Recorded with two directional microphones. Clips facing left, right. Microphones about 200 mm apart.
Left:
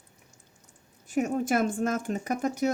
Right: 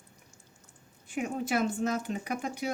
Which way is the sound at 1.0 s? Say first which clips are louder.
Left 6 dB; 45° left (ahead or behind).